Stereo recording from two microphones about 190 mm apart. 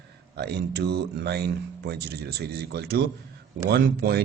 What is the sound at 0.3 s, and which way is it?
Speech, 60° right (ahead or behind).